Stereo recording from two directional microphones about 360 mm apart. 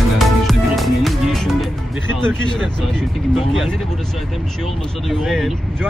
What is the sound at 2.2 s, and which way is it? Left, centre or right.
Vehicle, centre.